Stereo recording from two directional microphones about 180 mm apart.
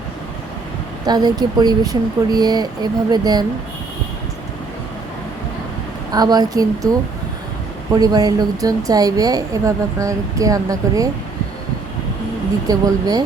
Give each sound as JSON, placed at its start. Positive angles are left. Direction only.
{"t": 1.0, "sound": "speech", "side_deg": -25}
{"t": 6.1, "sound": "speech", "side_deg": -20}
{"t": 7.9, "sound": "speech", "side_deg": -20}
{"t": 12.6, "sound": "speech", "side_deg": -20}